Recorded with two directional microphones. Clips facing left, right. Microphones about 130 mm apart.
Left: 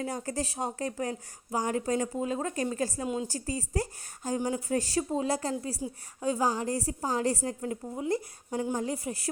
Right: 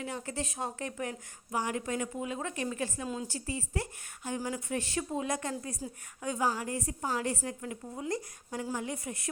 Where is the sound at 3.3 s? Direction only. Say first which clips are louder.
Left 3 dB; 40° left (ahead or behind).